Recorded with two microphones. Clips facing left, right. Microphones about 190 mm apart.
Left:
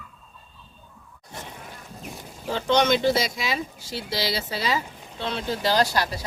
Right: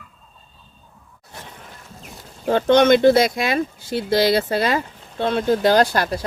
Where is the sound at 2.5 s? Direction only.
55° right (ahead or behind).